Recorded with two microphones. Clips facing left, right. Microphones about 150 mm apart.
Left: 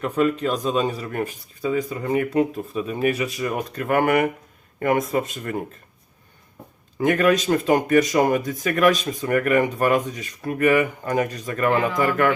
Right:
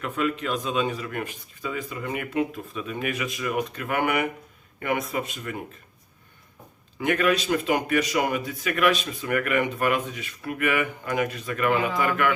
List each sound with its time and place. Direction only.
0.0 s speech: 40° left (ahead or behind)
7.0 s speech: 45° left (ahead or behind)